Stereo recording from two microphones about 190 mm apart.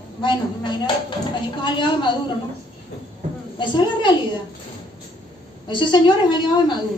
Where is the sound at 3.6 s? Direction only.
25° left (ahead or behind).